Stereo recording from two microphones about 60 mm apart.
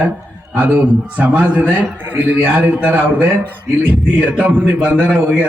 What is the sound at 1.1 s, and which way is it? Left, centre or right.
A man's voice, right.